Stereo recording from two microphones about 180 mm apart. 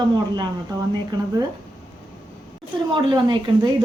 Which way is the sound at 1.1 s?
25° right (ahead or behind).